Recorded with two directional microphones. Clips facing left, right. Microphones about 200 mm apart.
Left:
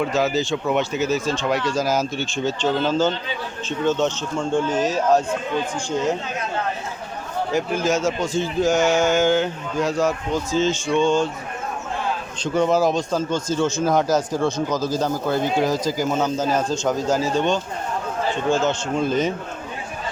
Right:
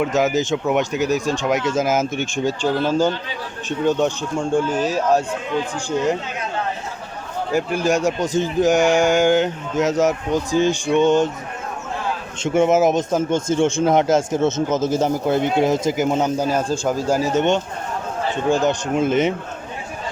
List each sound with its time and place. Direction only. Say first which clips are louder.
0.1 s a man's voice: right 2 dB; 20° right (ahead or behind)
7.5 s a man's voice: right 2 dB; 10° right (ahead or behind)
12.4 s speech: right 3 dB; 20° right (ahead or behind)